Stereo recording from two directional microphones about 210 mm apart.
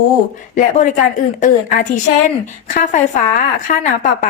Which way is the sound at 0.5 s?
35° left (ahead or behind).